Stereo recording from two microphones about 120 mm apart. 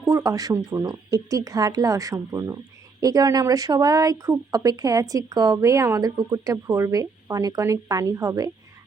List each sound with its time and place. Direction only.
0.0 s speech: 25° right (ahead or behind)